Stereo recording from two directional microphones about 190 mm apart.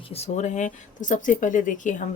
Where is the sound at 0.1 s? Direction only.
35° left (ahead or behind).